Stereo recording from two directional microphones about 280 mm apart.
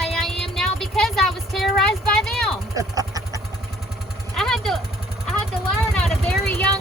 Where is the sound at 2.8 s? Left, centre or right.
Centre.